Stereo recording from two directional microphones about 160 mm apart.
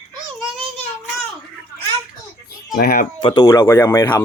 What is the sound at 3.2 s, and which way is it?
Speech, 25° left (ahead or behind).